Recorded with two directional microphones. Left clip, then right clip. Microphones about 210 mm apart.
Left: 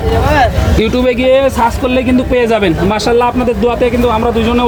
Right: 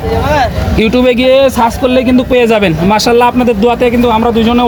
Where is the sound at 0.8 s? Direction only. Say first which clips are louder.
Right 4 dB; 45° right (ahead or behind).